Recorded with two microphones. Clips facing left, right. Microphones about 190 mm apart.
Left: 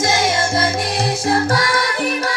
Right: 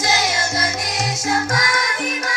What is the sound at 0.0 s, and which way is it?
Music, 25° left (ahead or behind).